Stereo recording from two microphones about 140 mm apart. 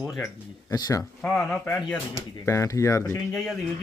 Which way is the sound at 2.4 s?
20° left (ahead or behind).